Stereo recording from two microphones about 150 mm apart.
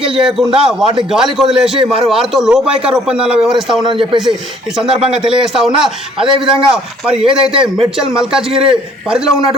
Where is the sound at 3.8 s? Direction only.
35° right (ahead or behind).